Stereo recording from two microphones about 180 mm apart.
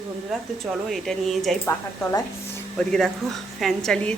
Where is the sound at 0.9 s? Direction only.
Centre (ahead or behind).